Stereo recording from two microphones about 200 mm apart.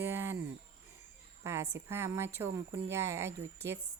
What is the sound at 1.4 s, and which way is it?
Speech, 15° right (ahead or behind).